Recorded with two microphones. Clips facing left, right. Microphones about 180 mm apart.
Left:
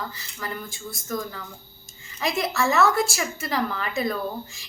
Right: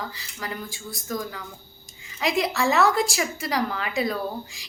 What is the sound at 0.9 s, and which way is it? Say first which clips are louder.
A woman's voice: even; 10° right (ahead or behind).